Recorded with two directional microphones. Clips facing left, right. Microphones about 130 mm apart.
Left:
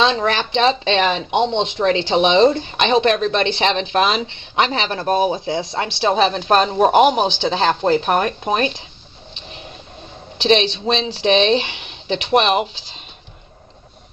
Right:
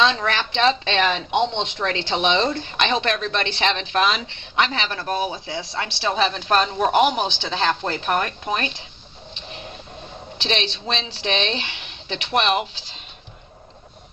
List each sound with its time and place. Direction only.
0.0 s speech: 25° left (ahead or behind)
10.4 s speech: 20° left (ahead or behind)